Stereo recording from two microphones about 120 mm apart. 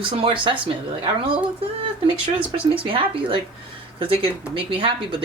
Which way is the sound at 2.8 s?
45° right (ahead or behind).